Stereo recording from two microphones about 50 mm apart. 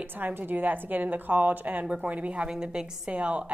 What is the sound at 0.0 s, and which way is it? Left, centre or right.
A woman's voice, right.